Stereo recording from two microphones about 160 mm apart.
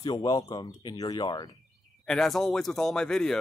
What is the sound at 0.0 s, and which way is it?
Speech, 25° left (ahead or behind).